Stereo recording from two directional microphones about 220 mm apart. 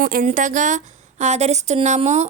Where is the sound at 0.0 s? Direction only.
40° right (ahead or behind).